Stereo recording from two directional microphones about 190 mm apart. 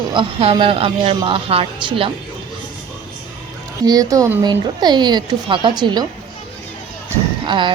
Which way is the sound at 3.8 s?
20° right (ahead or behind).